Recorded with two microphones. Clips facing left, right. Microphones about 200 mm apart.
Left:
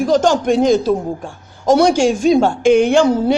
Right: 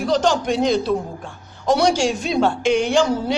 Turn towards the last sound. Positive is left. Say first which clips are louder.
# left 6 dB
turn(degrees=55)  # may be behind; listen again after turning